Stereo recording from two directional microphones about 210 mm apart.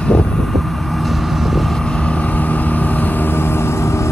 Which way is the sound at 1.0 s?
Centre (ahead or behind).